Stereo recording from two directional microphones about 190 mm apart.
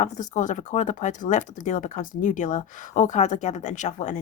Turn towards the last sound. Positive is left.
turn(degrees=40)  # may be behind; listen again after turning